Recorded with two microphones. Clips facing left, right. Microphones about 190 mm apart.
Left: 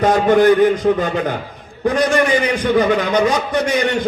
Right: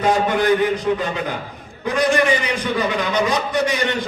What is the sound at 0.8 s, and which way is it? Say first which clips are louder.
A man's voice: left 5 dB; 55° left (ahead or behind).